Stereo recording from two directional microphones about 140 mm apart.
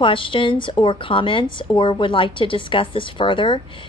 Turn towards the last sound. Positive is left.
turn(degrees=35)  # may be behind; listen again after turning